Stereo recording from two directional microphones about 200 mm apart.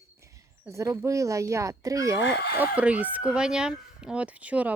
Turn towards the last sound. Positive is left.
turn(degrees=-5)  # may be behind; listen again after turning